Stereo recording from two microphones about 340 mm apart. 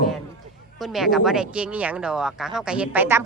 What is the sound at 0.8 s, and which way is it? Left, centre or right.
Speech, centre.